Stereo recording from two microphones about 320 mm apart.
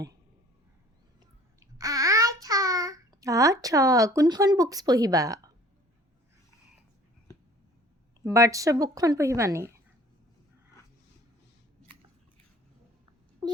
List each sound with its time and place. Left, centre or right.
1.5 s child singing: centre
8.2 s speech: centre